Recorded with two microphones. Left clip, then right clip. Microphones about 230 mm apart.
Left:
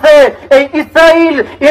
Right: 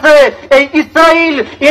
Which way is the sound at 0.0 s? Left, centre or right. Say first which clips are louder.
Left 1 dB; left.